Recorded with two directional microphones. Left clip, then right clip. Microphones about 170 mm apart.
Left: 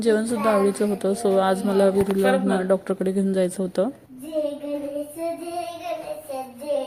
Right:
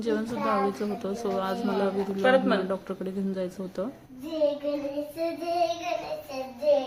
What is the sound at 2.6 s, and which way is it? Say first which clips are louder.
Speech: left 10 dB; 30° left (ahead or behind).